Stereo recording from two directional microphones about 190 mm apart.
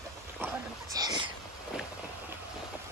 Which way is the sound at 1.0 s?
20° right (ahead or behind).